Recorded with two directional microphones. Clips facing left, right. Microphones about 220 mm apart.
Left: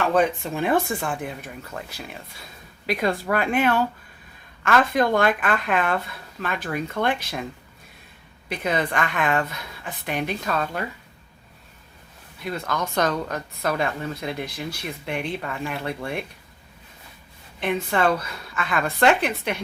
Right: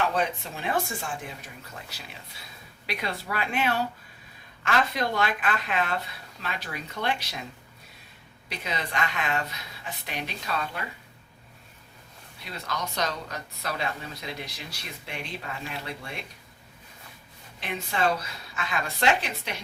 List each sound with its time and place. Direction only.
0.1 s a woman's voice: 55° left (ahead or behind)
8.4 s a woman's voice: 50° left (ahead or behind)
12.5 s a woman's voice: 50° left (ahead or behind)
17.6 s a woman's voice: 55° left (ahead or behind)